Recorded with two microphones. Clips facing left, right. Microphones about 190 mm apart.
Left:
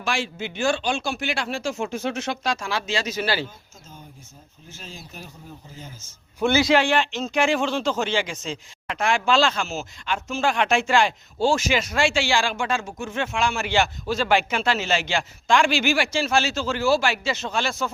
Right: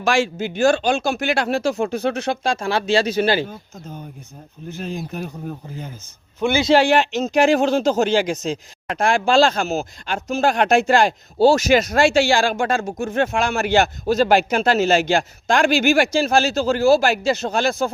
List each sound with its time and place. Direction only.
0.0 s speech: 45° right (ahead or behind); by 3.4 s 25° right (ahead or behind)
3.4 s speech: 60° right (ahead or behind)
6.5 s a man's voice: 20° right (ahead or behind)
6.7 s speech: 40° right (ahead or behind)